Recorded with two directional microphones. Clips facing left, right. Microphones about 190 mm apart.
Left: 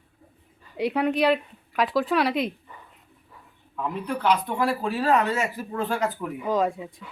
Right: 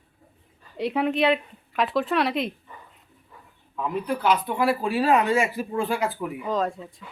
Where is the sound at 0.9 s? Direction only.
Centre (ahead or behind).